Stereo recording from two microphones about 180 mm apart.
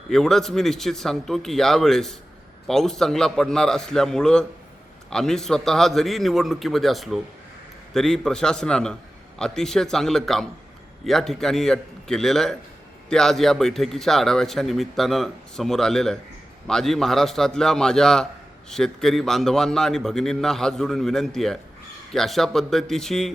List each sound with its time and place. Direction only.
0.1 s a man's voice: centre (ahead or behind)